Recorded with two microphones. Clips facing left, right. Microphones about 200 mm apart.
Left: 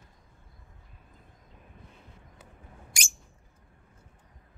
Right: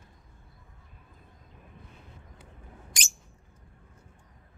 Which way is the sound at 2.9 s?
10° left (ahead or behind).